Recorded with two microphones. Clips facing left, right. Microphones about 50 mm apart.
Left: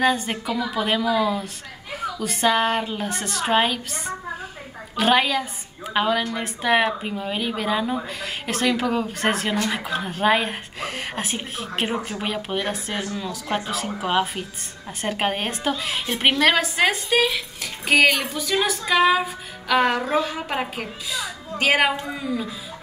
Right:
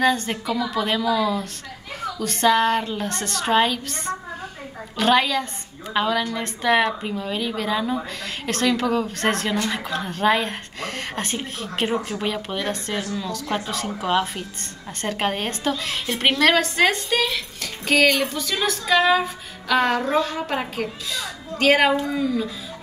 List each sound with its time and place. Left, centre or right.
0.0 s speech: centre